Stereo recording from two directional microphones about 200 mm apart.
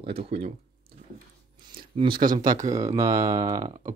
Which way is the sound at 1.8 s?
25° right (ahead or behind).